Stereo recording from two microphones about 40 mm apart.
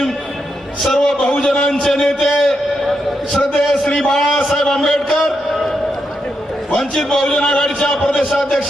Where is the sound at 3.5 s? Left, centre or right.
Centre.